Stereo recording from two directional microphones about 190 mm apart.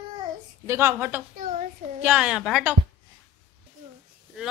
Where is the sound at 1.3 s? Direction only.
50° right (ahead or behind).